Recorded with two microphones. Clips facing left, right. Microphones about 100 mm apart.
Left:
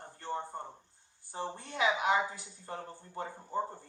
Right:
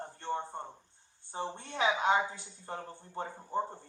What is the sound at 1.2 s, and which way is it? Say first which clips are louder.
A woman's voice: right 1 dB; 25° right (ahead or behind).